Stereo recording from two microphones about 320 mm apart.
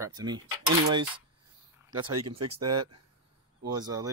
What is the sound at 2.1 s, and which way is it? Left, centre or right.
Speech, right.